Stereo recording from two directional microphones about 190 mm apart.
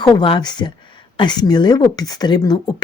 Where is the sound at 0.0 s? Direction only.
25° left (ahead or behind).